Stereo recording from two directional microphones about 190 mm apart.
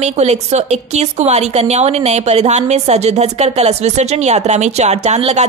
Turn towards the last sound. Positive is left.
turn(degrees=-35)  # may be behind; listen again after turning